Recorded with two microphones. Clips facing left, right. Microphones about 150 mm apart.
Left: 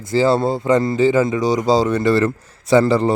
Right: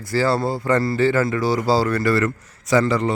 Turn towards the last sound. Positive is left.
turn(degrees=35)  # may be behind; listen again after turning